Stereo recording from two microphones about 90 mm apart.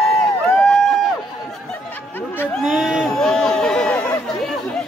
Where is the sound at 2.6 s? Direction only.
Centre (ahead or behind).